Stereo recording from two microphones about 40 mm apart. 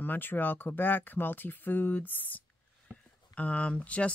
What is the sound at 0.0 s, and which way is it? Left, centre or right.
Speech, left.